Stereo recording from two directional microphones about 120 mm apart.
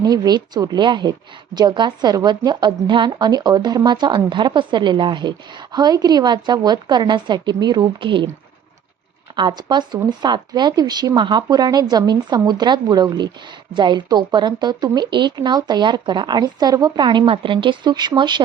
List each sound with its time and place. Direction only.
0.0 s speech: 35° right (ahead or behind)
9.5 s speech: 35° right (ahead or behind)